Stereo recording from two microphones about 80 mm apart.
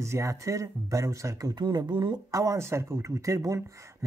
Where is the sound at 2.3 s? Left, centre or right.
Right.